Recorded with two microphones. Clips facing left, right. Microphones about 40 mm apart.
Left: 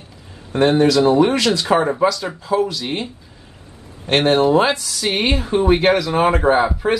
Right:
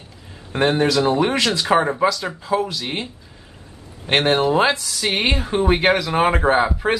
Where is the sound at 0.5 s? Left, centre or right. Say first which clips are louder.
Left 4 dB; centre.